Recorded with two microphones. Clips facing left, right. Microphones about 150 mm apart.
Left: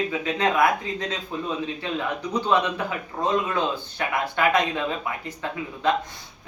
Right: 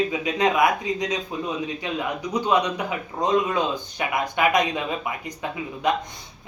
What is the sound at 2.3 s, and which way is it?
A man's voice, 15° right (ahead or behind).